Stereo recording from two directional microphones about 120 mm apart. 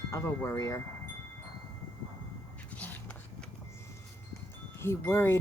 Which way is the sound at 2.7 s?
15° left (ahead or behind).